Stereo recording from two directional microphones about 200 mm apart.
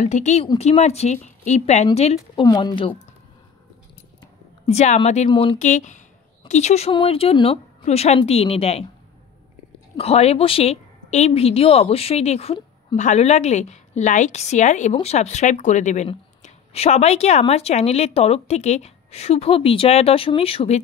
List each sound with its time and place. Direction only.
0.0 s a woman's voice: 35° left (ahead or behind)
2.1 s speech: 20° left (ahead or behind)
4.6 s a woman's voice: 35° left (ahead or behind)
9.9 s a woman's voice: 30° left (ahead or behind)